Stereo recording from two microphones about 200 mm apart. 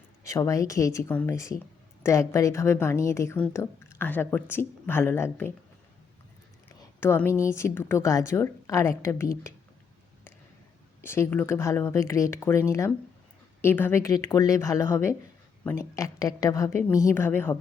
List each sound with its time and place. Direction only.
0.3 s a woman's voice: 15° left (ahead or behind)
7.0 s a woman's voice: 10° left (ahead or behind)
11.0 s a woman's voice: 10° left (ahead or behind)